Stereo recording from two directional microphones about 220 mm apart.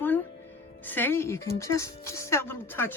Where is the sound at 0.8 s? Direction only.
10° left (ahead or behind).